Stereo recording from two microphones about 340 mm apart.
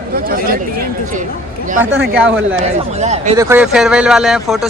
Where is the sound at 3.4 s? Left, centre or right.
Centre.